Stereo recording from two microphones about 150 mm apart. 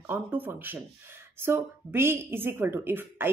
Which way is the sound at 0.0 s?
10° right (ahead or behind).